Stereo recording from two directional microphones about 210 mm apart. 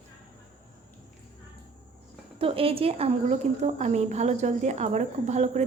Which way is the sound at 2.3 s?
25° right (ahead or behind).